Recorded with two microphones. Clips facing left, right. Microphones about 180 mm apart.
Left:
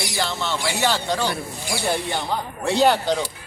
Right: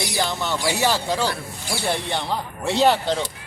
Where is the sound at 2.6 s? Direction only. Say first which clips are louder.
Left 1 dB; centre (ahead or behind).